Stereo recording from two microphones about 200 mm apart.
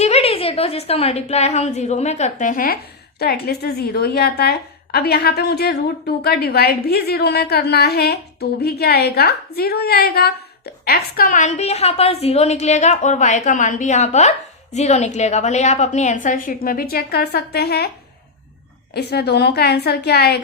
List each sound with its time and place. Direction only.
0.0 s a woman's voice: 30° left (ahead or behind); by 17.9 s 55° left (ahead or behind)
18.9 s a woman's voice: 55° left (ahead or behind)